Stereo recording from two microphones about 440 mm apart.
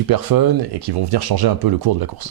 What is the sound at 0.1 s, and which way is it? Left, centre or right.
Speech, right.